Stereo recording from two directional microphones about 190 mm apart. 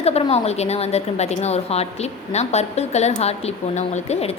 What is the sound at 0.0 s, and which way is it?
A woman's voice, 30° left (ahead or behind).